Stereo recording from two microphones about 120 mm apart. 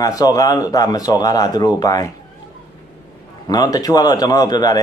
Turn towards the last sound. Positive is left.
turn(degrees=35)  # may be behind; listen again after turning